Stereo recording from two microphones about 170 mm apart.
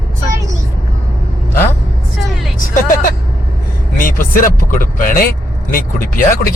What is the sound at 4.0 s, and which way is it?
Speech, 50° left (ahead or behind).